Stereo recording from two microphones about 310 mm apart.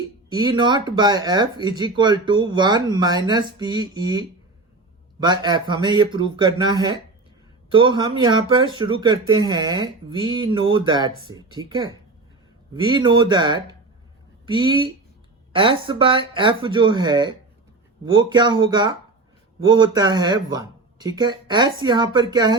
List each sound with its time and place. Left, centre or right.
0.3 s speech: centre
5.2 s speech: centre